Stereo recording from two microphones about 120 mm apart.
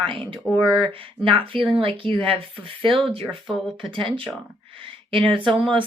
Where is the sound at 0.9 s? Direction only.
45° right (ahead or behind).